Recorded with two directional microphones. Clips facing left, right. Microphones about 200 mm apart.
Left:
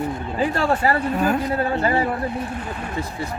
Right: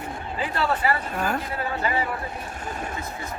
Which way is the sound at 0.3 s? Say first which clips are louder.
Left 5 dB; 45° left (ahead or behind).